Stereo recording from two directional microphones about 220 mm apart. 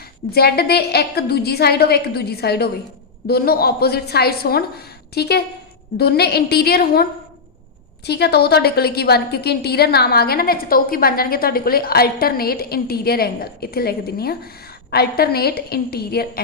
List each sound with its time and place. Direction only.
0.3 s a woman's voice: 45° left (ahead or behind)